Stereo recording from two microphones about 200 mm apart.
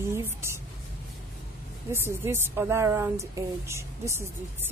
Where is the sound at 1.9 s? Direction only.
10° right (ahead or behind).